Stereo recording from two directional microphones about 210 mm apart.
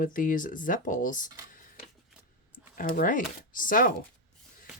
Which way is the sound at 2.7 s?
40° left (ahead or behind).